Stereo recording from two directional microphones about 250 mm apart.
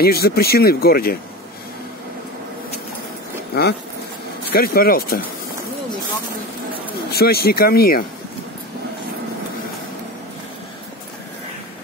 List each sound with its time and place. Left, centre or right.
0.0 s speech: left
4.5 s speech: left
7.1 s speech: left